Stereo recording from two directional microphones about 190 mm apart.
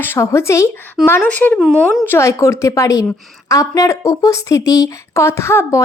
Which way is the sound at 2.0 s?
15° left (ahead or behind).